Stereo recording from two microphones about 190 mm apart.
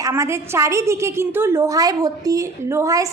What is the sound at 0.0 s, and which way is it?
A woman's voice, 15° right (ahead or behind).